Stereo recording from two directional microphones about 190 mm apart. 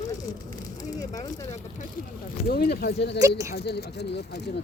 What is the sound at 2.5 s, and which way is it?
Speech, 55° left (ahead or behind).